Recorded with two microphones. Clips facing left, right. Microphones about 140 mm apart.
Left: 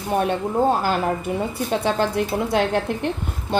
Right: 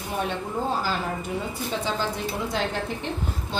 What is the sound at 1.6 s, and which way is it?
A woman's voice, 60° left (ahead or behind).